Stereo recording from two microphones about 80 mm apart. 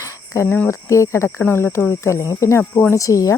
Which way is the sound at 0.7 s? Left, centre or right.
Left.